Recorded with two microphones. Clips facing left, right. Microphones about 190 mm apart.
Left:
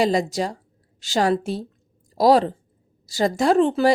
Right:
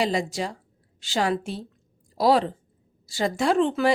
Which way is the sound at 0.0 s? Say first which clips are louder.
Left 5 dB; 40° left (ahead or behind).